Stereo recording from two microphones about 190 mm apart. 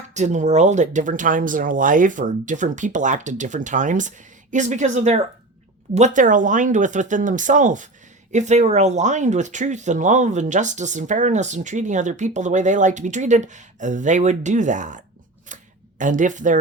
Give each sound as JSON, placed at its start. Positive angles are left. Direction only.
{"t": 0.1, "sound": "speech", "side_deg": -40}